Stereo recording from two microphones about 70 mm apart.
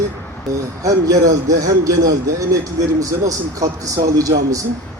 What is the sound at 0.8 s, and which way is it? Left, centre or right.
A man's voice, right.